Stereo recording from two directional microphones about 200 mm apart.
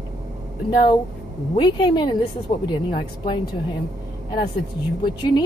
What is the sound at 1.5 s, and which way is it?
A woman's voice, 20° left (ahead or behind).